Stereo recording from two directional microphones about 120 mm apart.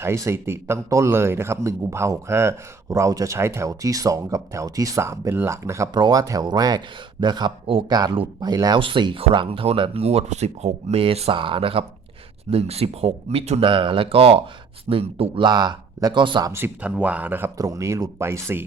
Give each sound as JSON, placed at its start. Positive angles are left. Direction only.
{"t": 0.0, "sound": "speech", "side_deg": -20}
{"t": 5.9, "sound": "speech", "side_deg": -35}
{"t": 13.7, "sound": "speech", "side_deg": -45}
{"t": 15.4, "sound": "speech", "side_deg": -35}
{"t": 16.5, "sound": "speech", "side_deg": -20}
{"t": 17.6, "sound": "speech", "side_deg": -25}